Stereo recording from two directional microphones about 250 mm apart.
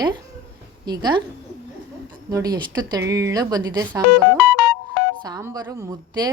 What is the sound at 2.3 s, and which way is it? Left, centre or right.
A woman's voice, centre.